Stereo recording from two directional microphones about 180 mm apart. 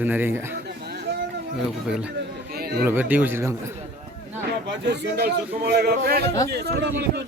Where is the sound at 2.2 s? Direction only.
60° right (ahead or behind).